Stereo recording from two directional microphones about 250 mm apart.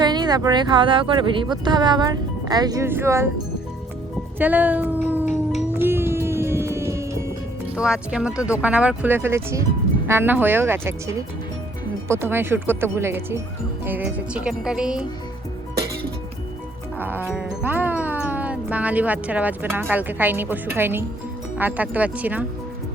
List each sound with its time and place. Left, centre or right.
0.0 s speech: centre
4.4 s speech: centre
5.7 s music: centre
7.8 s speech: centre
17.0 s speech: centre